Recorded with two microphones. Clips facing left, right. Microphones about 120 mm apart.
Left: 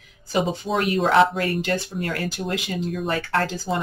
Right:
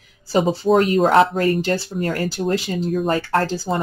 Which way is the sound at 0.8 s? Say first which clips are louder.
Even; 40° right (ahead or behind).